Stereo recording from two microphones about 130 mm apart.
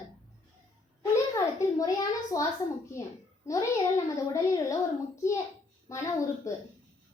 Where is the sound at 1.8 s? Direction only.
25° left (ahead or behind).